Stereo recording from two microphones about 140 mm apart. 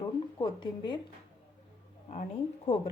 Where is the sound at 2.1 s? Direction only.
55° left (ahead or behind).